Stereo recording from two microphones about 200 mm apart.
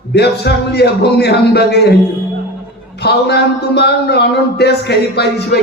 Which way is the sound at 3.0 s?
55° left (ahead or behind).